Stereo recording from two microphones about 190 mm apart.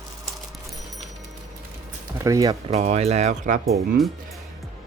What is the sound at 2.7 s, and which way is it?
Speech, 35° right (ahead or behind).